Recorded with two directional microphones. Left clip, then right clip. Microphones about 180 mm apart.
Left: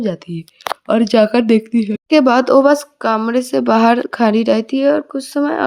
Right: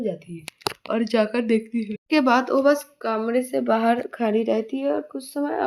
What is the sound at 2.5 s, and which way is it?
Speech, 90° left.